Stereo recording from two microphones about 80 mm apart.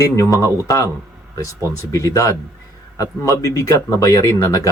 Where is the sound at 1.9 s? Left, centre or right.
Left.